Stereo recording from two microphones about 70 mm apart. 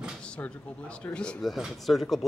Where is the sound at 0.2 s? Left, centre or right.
Centre.